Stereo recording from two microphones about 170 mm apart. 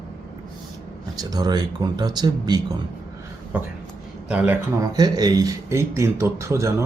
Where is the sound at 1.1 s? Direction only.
20° right (ahead or behind).